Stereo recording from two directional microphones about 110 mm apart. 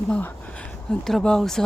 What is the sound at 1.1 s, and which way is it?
Speech, 5° left (ahead or behind).